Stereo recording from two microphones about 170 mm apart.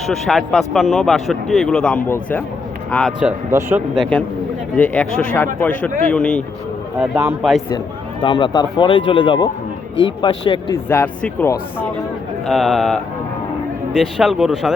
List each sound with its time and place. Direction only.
0.1 s speech: centre (ahead or behind)
3.1 s a man's voice: 5° right (ahead or behind)
3.9 s speech: centre (ahead or behind)
7.0 s a man's voice: 10° right (ahead or behind)
8.2 s speech: 30° left (ahead or behind)
10.8 s speech: 10° left (ahead or behind)